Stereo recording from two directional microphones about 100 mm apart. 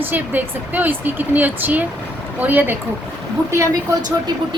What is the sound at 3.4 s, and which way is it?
Speech, 30° right (ahead or behind).